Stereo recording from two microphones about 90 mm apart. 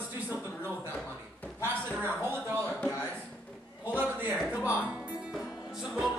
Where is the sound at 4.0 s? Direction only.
20° right (ahead or behind).